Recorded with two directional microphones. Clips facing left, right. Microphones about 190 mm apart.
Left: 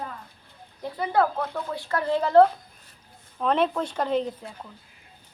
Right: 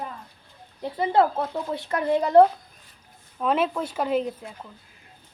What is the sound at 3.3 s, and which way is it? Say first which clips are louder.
Speech: even; 5° right (ahead or behind).